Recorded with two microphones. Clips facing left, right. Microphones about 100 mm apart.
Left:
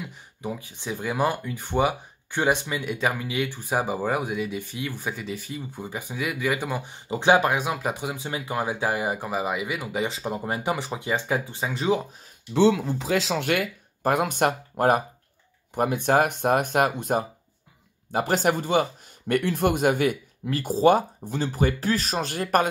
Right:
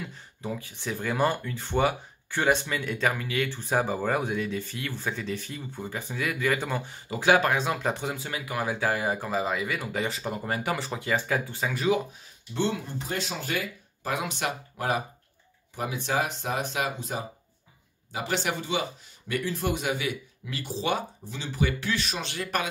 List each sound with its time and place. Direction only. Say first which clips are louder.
0.0 s speech: left 2 dB; 15° left (ahead or behind)
8.3 s speech: left 4 dB; 25° left (ahead or behind)
12.5 s speech: left 9 dB; 90° left; by 22.7 s 45° left (ahead or behind)